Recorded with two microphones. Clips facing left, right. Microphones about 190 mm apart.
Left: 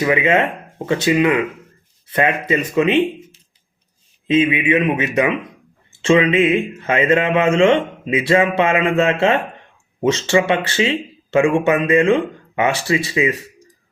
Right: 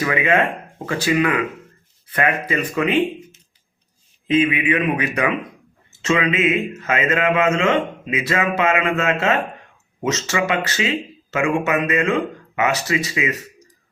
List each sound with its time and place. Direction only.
0.0 s speech: 20° left (ahead or behind)